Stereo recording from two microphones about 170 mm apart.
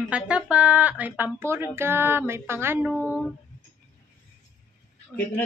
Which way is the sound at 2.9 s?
10° left (ahead or behind).